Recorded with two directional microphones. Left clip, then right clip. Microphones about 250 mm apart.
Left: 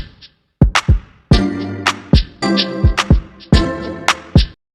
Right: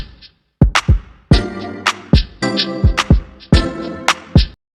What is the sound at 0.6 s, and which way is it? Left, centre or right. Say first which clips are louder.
Music: even; centre.